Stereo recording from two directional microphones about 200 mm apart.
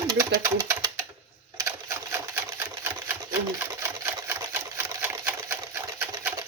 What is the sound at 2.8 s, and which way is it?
Typewriter, 10° right (ahead or behind).